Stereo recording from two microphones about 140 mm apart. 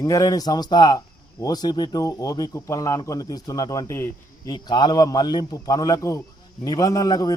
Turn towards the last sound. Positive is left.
turn(degrees=25)  # may be behind; listen again after turning